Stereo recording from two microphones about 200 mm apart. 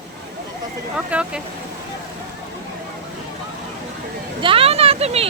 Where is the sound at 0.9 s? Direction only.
5° right (ahead or behind).